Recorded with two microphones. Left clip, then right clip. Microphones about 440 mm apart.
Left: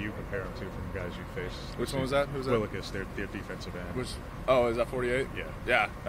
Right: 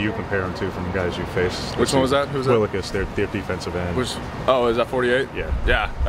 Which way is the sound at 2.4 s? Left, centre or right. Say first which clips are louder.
Right 11 dB; centre.